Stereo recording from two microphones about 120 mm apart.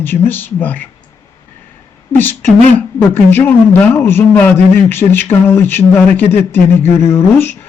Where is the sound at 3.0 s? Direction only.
15° left (ahead or behind).